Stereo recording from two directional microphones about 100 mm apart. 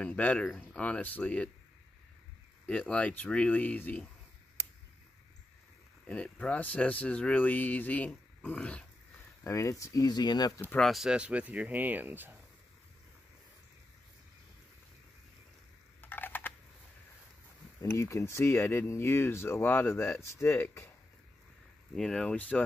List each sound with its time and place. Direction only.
0.0 s speech: 15° left (ahead or behind)
2.6 s speech: 10° left (ahead or behind)
6.0 s speech: 15° left (ahead or behind)
9.4 s speech: 30° left (ahead or behind)
10.8 s speech: centre (ahead or behind); by 12.4 s 20° right (ahead or behind)
16.0 s typing: 20° left (ahead or behind)
17.8 s speech: 30° left (ahead or behind)
21.9 s speech: 5° left (ahead or behind)